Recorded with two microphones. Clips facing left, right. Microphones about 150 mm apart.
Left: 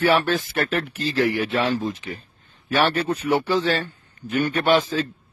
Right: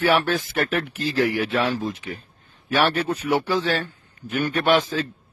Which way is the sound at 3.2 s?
10° left (ahead or behind).